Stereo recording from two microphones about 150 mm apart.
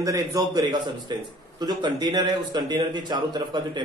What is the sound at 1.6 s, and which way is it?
A man's voice, 30° right (ahead or behind).